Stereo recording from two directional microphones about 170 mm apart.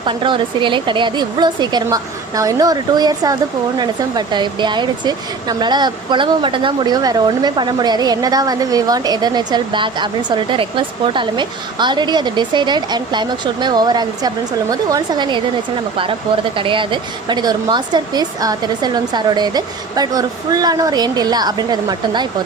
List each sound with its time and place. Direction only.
0.0 s speech: 30° right (ahead or behind)
16.6 s speech: 30° right (ahead or behind)